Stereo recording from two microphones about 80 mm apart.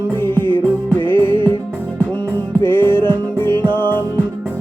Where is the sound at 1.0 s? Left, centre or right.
Right.